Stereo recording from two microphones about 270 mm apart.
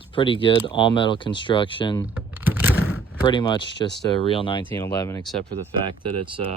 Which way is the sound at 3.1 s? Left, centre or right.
Centre.